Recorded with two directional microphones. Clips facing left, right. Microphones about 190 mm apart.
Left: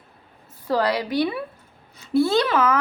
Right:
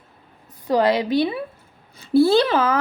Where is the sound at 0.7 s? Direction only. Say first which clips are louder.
Right 4 dB; 20° right (ahead or behind).